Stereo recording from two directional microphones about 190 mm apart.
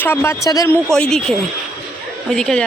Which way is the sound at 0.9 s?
5° left (ahead or behind).